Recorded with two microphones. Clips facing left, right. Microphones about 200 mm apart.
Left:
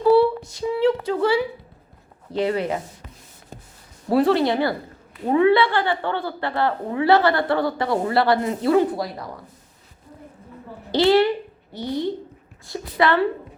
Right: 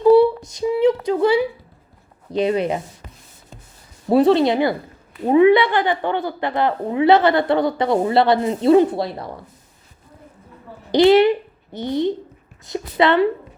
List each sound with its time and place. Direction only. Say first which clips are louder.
0.0 s a sound: right 4 dB; 20° right (ahead or behind)
2.3 s a woman's voice: right 3 dB; 20° right (ahead or behind)
4.1 s a woman's voice: right 4 dB; 20° right (ahead or behind)
10.9 s a child's voice: right 4 dB; 20° right (ahead or behind)